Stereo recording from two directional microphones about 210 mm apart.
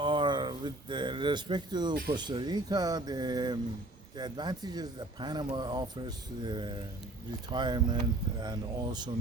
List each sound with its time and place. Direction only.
0.0 s speech: 20° right (ahead or behind)